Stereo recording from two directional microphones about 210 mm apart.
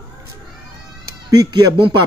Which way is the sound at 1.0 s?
20° right (ahead or behind).